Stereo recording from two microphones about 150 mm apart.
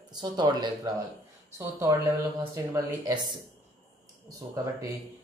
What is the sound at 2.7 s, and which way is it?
Speech, 25° right (ahead or behind).